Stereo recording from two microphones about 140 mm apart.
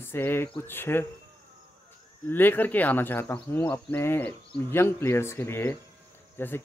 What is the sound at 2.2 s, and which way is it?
Speech, 15° left (ahead or behind).